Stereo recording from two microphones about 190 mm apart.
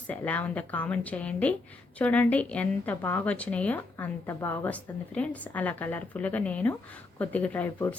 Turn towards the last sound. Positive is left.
turn(degrees=10)  # may be behind; listen again after turning